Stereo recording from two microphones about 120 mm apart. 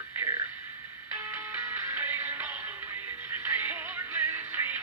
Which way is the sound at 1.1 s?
15° right (ahead or behind).